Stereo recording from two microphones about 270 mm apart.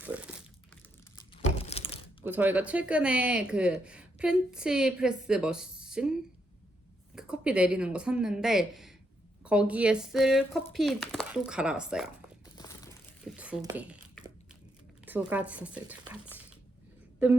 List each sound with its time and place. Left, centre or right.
0.0 s crumpling: centre
1.1 s crumpling: left
2.2 s speech: centre
7.2 s speech: centre
12.5 s crumpling: centre
13.2 s speech: centre